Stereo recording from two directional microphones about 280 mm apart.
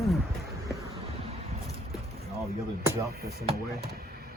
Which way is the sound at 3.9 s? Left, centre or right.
Right.